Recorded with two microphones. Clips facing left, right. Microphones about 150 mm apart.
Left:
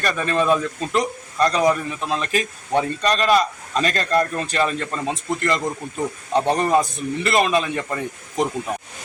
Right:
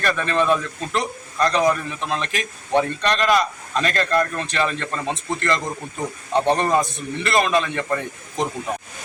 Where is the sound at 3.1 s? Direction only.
35° left (ahead or behind).